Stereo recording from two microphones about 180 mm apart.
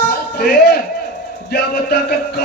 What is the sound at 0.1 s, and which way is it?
Music, 65° left (ahead or behind).